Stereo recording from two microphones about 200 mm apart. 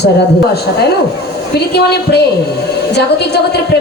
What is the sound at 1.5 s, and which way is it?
Music, 55° left (ahead or behind).